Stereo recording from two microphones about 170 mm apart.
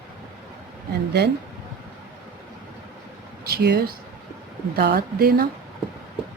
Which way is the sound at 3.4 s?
70° right (ahead or behind).